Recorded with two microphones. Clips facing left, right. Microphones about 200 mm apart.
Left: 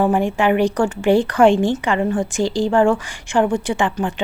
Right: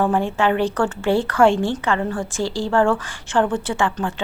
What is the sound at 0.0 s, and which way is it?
Speech, 15° left (ahead or behind).